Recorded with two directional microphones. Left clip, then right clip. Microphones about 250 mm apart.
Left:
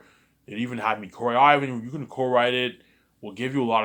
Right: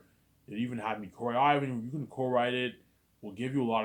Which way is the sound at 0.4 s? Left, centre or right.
Centre.